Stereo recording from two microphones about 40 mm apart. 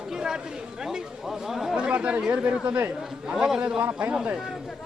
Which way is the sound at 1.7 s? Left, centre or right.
Right.